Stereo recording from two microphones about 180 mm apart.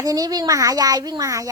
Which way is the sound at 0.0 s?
20° right (ahead or behind).